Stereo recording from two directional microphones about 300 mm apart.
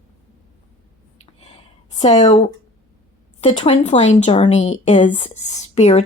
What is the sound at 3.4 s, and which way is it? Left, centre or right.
Speech, left.